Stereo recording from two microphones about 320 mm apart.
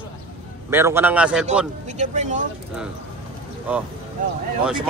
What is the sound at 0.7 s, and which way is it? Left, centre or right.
Speech, centre.